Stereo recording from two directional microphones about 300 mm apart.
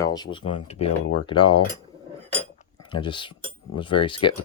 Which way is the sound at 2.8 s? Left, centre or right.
Centre.